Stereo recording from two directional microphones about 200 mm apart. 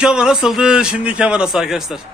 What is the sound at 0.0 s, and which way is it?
A man's voice, 5° right (ahead or behind).